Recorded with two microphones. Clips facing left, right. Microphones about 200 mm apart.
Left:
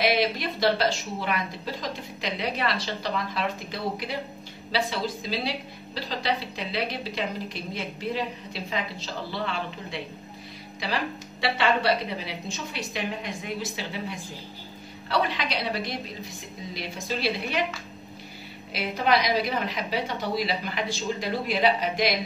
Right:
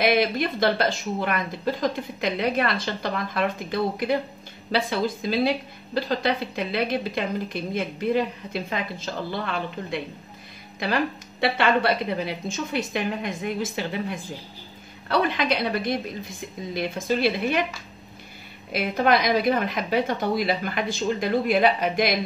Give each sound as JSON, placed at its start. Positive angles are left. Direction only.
{"t": 0.0, "sound": "a woman's voice", "side_deg": -50}
{"t": 11.4, "sound": "a woman's voice", "side_deg": -55}
{"t": 18.7, "sound": "a woman's voice", "side_deg": -50}